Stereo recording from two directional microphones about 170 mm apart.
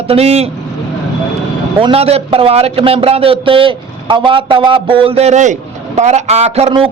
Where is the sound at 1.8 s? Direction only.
35° right (ahead or behind).